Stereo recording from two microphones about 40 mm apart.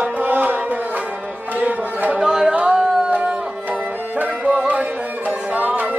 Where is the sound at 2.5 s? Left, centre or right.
Right.